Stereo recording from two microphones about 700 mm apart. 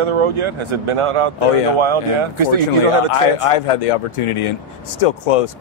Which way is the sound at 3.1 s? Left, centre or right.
Left.